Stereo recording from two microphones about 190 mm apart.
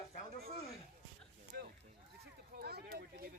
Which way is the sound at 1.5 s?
60° right (ahead or behind).